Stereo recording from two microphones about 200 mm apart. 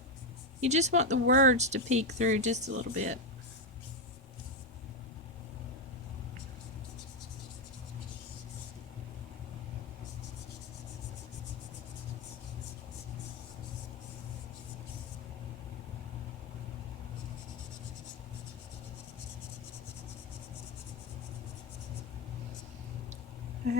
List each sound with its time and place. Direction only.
0.6 s speech: 35° right (ahead or behind)